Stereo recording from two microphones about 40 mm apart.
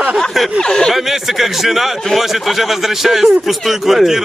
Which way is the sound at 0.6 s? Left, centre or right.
Centre.